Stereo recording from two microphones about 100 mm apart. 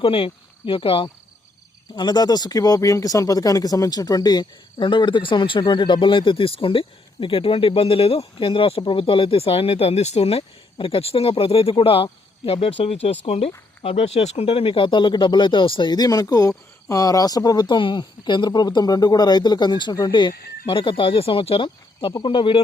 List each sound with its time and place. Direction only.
0.0 s speech: 65° left (ahead or behind)
2.0 s speech: 45° left (ahead or behind); by 10.4 s 90° left
10.8 s speech: 65° left (ahead or behind)